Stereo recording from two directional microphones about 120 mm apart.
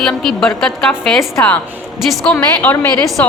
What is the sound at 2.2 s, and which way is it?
Speech, 10° left (ahead or behind).